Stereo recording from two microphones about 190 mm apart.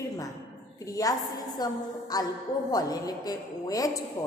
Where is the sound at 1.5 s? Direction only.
20° left (ahead or behind).